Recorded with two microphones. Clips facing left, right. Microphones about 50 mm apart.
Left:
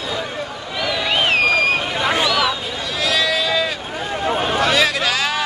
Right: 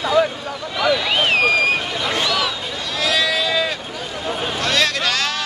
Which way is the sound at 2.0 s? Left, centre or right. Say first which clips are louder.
Left 3 dB; centre.